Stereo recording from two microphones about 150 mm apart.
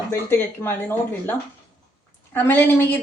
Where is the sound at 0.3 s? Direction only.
15° left (ahead or behind).